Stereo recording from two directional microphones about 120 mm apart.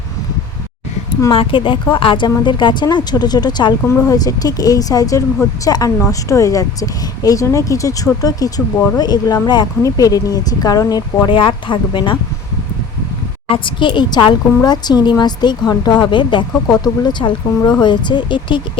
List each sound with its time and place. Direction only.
1.3 s a woman's voice: 45° left (ahead or behind)
3.8 s a woman's voice: 25° left (ahead or behind)
11.3 s speech: 45° left (ahead or behind)
13.5 s a woman's voice: 45° left (ahead or behind)